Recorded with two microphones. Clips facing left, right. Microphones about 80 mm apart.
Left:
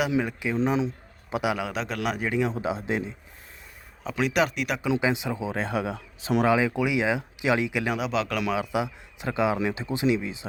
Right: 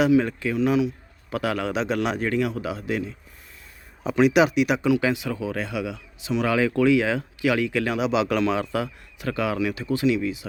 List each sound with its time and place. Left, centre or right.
0.1 s speech: centre
0.5 s speech: left
1.3 s speech: centre
2.5 s speech: left
4.0 s speech: centre
4.9 s speech: left
6.4 s speech: centre
7.9 s speech: centre
8.4 s speech: centre; by 10.4 s left